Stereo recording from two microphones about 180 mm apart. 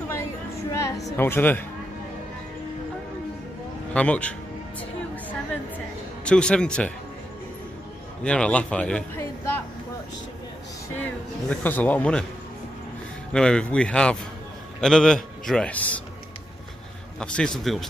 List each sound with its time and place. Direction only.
0.7 s a sound: 15° left (ahead or behind)
1.1 s speech: 10° left (ahead or behind)
3.9 s speech: 5° left (ahead or behind)
6.2 s a man's voice: 5° left (ahead or behind)
8.2 s a man's voice: 5° left (ahead or behind)
11.0 s speech: 10° left (ahead or behind)
13.3 s a man's voice: 5° left (ahead or behind)
17.2 s a man's voice: 5° left (ahead or behind)